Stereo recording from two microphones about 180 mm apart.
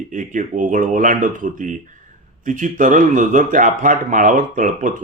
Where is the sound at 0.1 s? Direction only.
45° right (ahead or behind).